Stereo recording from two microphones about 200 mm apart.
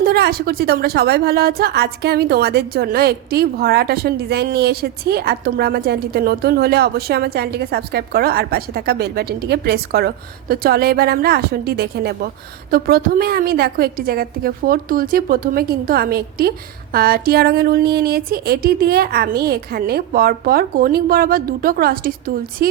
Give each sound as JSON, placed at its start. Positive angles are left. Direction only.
{"t": 0.0, "sound": "a woman's voice", "side_deg": -50}